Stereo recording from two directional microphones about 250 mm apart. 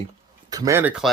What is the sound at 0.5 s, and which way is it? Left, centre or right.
Speech, centre.